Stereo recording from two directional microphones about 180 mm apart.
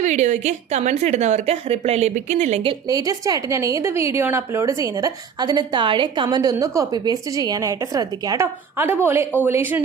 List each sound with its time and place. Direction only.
0.0 s a woman's voice: 40° right (ahead or behind)
2.8 s a woman's voice: 20° right (ahead or behind)